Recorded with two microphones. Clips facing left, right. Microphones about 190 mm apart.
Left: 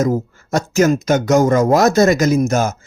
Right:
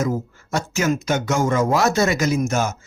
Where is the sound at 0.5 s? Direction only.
40° left (ahead or behind).